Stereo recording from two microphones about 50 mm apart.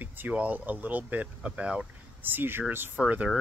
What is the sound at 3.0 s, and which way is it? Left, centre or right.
Speech, right.